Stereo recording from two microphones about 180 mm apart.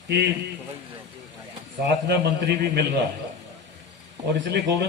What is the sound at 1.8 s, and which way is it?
A man's voice, 70° right (ahead or behind).